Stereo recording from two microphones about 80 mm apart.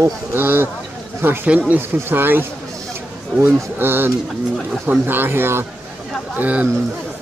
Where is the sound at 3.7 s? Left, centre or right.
Right.